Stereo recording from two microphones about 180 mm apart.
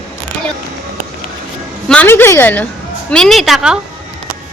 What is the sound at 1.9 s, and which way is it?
A woman's voice, 10° left (ahead or behind).